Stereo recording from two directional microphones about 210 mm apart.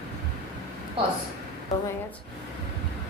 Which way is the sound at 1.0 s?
25° right (ahead or behind).